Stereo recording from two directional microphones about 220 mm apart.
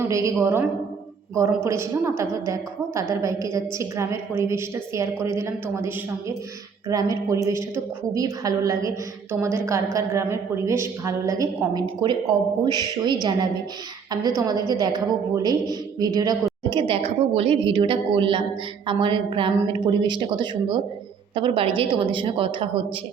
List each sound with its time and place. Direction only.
0.0 s a woman's voice: 15° right (ahead or behind)